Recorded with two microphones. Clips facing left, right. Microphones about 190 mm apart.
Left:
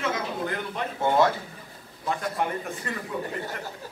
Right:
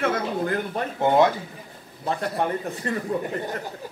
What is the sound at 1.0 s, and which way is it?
Speech, 20° right (ahead or behind).